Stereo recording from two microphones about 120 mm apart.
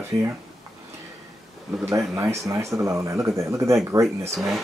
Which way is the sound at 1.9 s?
20° right (ahead or behind).